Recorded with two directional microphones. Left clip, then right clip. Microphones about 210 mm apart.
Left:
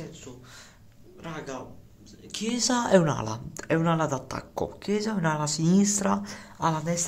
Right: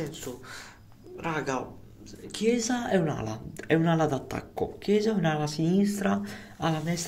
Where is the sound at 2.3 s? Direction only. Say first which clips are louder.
Even; 10° left (ahead or behind).